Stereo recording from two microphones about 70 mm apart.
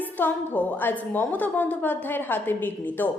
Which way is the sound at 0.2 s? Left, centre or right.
Left.